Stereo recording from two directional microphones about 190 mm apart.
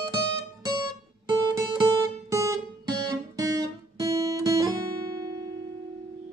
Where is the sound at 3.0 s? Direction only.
20° right (ahead or behind).